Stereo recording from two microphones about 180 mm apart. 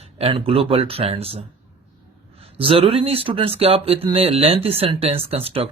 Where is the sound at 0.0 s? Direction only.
30° right (ahead or behind).